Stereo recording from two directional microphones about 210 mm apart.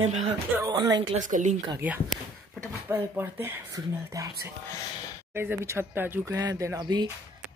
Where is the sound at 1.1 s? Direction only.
35° right (ahead or behind).